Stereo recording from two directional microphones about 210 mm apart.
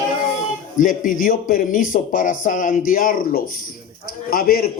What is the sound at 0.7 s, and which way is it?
A man's voice, 40° left (ahead or behind).